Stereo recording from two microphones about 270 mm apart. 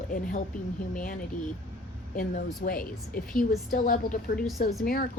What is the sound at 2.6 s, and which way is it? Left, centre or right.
A woman's voice, left.